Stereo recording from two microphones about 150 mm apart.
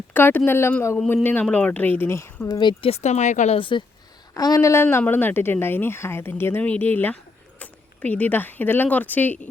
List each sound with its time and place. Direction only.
0.1 s a woman's voice: 15° left (ahead or behind)
2.6 s speech: 35° left (ahead or behind); by 3.6 s 50° left (ahead or behind)
3.6 s a woman's voice: 35° left (ahead or behind); by 9.5 s 10° left (ahead or behind)